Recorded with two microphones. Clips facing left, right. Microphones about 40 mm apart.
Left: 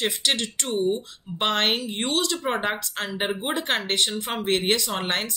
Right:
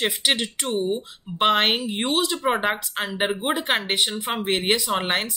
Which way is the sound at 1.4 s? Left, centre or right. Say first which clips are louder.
Right 4 dB; centre.